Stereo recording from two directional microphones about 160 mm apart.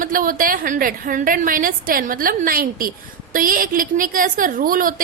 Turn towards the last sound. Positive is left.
turn(degrees=-60)  # may be behind; listen again after turning